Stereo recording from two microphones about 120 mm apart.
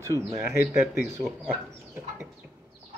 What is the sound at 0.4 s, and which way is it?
A man's voice, 20° right (ahead or behind).